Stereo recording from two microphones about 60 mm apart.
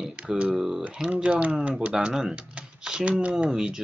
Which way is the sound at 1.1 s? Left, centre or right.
Centre.